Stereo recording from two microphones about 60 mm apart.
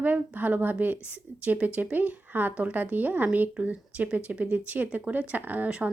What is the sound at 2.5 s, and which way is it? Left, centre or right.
Speech, centre.